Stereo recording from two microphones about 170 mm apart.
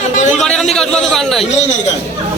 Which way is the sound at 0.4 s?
5° left (ahead or behind).